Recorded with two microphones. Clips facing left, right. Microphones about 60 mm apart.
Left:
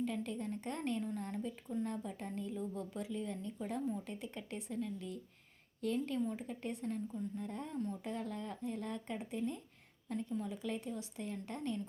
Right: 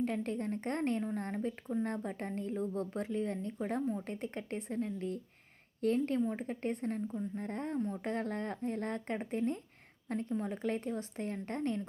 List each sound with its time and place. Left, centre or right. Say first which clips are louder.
0.0 s a woman's voice: right 4 dB; right